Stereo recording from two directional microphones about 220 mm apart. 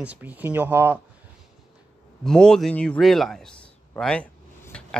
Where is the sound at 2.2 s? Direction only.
5° left (ahead or behind).